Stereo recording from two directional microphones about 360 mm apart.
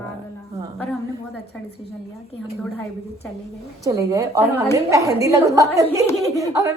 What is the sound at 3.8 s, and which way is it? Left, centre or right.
A woman's voice, centre.